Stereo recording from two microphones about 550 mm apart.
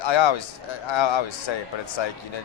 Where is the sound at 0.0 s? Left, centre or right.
Left.